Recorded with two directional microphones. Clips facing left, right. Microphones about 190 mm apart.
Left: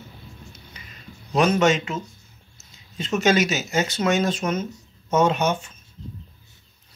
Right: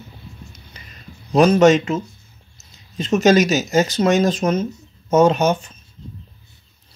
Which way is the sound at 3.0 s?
40° right (ahead or behind).